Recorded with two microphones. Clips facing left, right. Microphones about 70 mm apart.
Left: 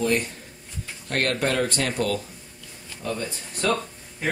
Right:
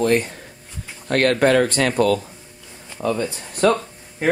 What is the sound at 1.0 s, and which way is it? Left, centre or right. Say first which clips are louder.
Speech: right 8 dB; right.